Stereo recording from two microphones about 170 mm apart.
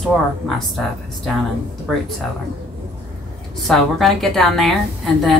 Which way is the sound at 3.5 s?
Centre (ahead or behind).